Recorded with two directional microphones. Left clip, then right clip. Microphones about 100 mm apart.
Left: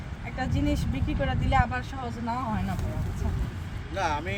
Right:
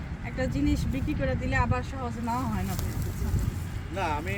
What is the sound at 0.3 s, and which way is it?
Speech, 30° left (ahead or behind).